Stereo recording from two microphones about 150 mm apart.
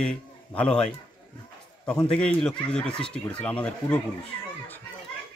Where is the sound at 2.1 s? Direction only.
5° left (ahead or behind).